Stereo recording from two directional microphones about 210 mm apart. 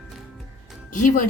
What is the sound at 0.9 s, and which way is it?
Speech, 40° left (ahead or behind).